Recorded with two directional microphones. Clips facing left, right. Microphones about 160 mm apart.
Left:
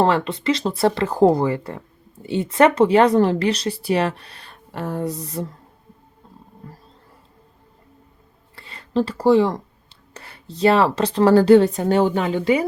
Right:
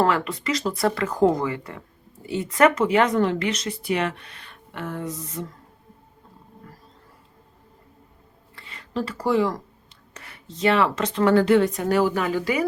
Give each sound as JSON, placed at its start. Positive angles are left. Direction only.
{"t": 0.0, "sound": "speech", "side_deg": 25}
{"t": 8.5, "sound": "speech", "side_deg": 35}